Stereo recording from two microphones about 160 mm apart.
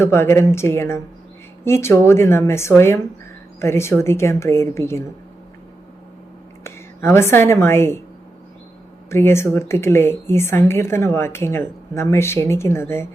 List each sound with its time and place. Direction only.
0.0 s a woman's voice: 15° left (ahead or behind)
6.7 s a woman's voice: 15° left (ahead or behind)
9.0 s a woman's voice: 15° left (ahead or behind)